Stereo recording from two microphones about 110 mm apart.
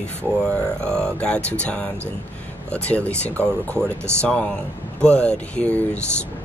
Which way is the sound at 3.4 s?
20° right (ahead or behind).